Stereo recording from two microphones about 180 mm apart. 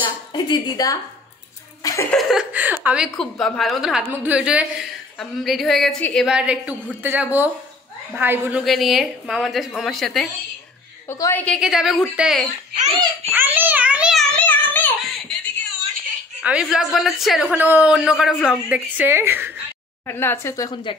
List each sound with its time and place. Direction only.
0.0 s a woman's voice: 25° left (ahead or behind)
1.8 s chuckle: 20° left (ahead or behind)
2.0 s a man's voice: centre (ahead or behind)
11.1 s speech: 15° left (ahead or behind)
11.4 s a man's voice: centre (ahead or behind)
13.3 s child singing: 10° right (ahead or behind)
14.3 s a sound: 10° left (ahead or behind)
16.7 s a man's voice: centre (ahead or behind)
20.1 s speech: 15° left (ahead or behind)